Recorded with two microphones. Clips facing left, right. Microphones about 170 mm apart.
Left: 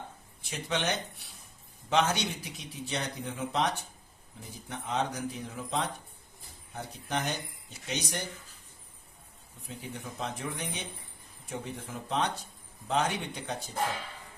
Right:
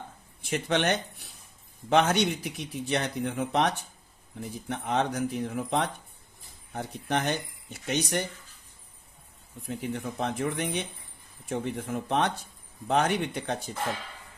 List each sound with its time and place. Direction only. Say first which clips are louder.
0.4 s speech: right 6 dB; 60° right (ahead or behind)
9.6 s speech: right 8 dB; 60° right (ahead or behind)